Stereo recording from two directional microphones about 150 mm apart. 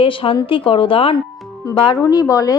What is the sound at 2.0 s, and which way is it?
Speech, 25° left (ahead or behind).